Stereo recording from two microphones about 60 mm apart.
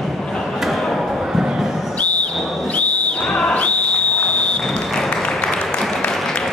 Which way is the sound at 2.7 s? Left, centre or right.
Left.